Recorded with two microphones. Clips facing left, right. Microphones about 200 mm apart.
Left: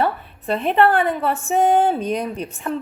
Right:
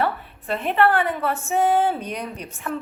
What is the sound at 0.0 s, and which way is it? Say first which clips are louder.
A woman's voice: left 3 dB; 30° left (ahead or behind).